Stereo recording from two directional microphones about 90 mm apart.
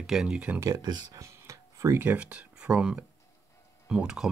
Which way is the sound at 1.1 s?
35° right (ahead or behind).